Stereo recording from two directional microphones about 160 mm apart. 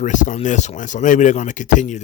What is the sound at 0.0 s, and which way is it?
Speech, 50° left (ahead or behind).